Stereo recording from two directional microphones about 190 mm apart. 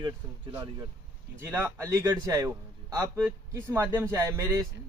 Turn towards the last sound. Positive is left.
turn(degrees=-15)  # may be behind; listen again after turning